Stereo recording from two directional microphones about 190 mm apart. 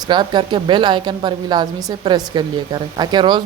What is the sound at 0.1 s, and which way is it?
A woman's voice, 25° right (ahead or behind).